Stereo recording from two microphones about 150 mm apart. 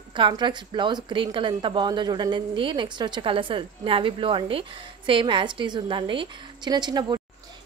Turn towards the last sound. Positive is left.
turn(degrees=-30)  # may be behind; listen again after turning